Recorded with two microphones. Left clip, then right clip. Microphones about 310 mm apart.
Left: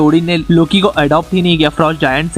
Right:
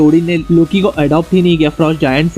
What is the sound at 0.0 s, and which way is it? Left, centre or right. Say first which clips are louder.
Speech: right 1 dB; left.